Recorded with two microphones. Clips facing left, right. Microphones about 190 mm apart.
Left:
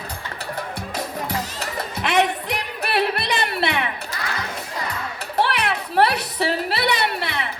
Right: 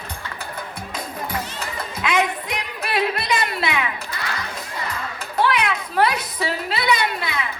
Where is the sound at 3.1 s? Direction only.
65° left (ahead or behind).